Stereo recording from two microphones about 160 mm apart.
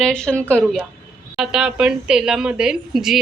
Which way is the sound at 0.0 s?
5° left (ahead or behind).